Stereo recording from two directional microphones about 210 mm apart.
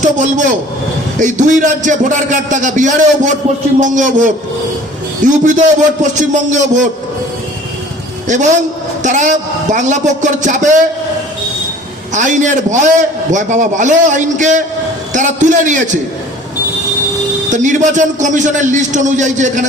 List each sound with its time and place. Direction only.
0.0 s a man's voice: 35° right (ahead or behind)
8.3 s a man's voice: 35° right (ahead or behind)
12.1 s a man's voice: 35° right (ahead or behind)
17.5 s a man's voice: 35° right (ahead or behind)